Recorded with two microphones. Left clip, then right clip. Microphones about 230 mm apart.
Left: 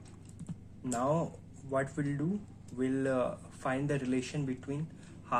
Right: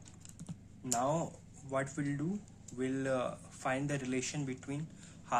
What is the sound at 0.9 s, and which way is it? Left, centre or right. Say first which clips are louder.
Speech: left 2 dB; centre.